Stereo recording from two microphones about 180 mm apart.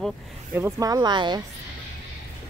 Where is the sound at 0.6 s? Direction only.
15° right (ahead or behind).